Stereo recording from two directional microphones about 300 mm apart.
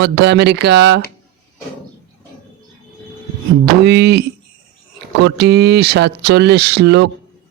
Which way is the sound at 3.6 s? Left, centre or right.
Right.